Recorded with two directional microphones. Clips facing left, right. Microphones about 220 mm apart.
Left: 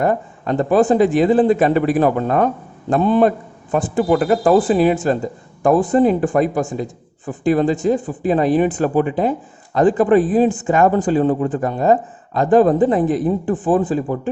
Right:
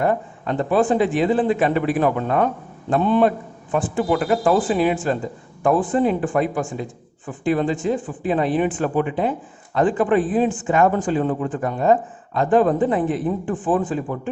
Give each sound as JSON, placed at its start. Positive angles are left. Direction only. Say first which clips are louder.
{"t": 0.0, "sound": "speech", "louder": "left 2 dB", "side_deg": 40}